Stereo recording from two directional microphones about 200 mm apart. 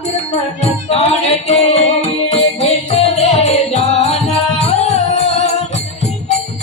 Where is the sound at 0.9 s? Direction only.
30° left (ahead or behind).